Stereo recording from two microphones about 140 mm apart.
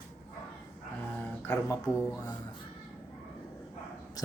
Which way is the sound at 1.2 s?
20° left (ahead or behind).